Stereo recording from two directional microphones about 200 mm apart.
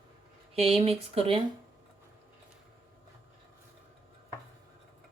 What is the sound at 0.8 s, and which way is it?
Speech, 30° right (ahead or behind).